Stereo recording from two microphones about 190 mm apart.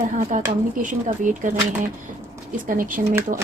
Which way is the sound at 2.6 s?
45° right (ahead or behind).